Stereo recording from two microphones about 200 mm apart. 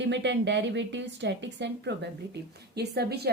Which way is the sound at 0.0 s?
60° right (ahead or behind).